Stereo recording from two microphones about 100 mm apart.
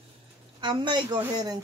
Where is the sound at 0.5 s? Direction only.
50° right (ahead or behind).